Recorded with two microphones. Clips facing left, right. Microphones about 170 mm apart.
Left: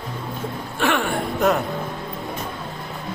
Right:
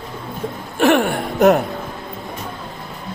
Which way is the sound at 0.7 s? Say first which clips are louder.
Right 7 dB; 45° right (ahead or behind).